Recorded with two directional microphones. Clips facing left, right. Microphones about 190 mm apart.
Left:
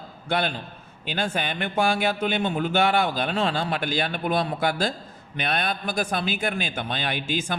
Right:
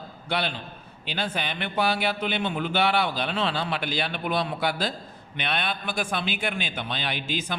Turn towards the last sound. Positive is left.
turn(degrees=50)  # may be behind; listen again after turning